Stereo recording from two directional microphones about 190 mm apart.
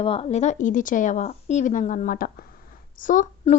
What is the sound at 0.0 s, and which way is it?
A woman's voice, 30° left (ahead or behind).